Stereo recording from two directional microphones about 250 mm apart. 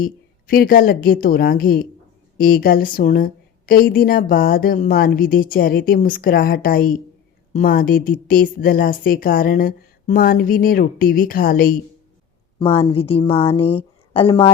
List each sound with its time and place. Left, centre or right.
0.0 s a woman's voice: left
12.5 s a woman's voice: left